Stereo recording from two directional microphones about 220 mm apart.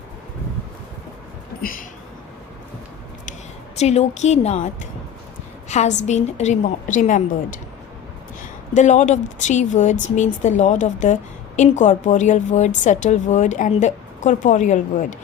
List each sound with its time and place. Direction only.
3.8 s a woman's voice: 30° left (ahead or behind)
8.4 s a woman's voice: 35° left (ahead or behind)